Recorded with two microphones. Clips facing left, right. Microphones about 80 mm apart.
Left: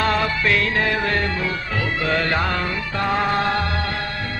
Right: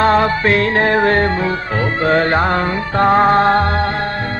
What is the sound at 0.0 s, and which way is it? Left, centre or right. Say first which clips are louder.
Music: right 7 dB; right.